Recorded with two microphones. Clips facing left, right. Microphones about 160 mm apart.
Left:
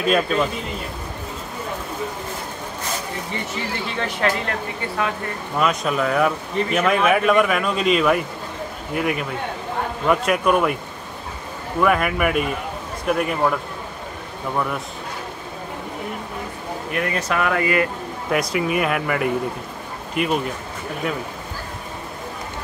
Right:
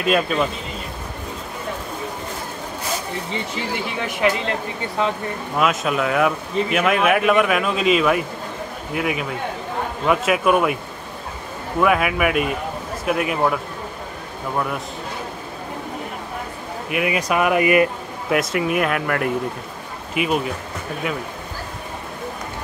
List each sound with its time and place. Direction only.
0.0 s speech: centre (ahead or behind)
3.3 s speech: 20° right (ahead or behind)
5.6 s speech: 5° right (ahead or behind)
11.8 s speech: 5° right (ahead or behind)
16.9 s speech: 10° right (ahead or behind)
18.3 s speech: centre (ahead or behind)